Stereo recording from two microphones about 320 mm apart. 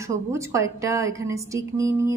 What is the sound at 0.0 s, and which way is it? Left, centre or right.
A woman's voice, centre.